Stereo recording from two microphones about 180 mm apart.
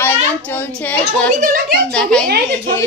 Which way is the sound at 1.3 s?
50° right (ahead or behind).